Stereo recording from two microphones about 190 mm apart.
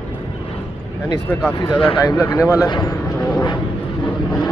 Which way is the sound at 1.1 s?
20° left (ahead or behind).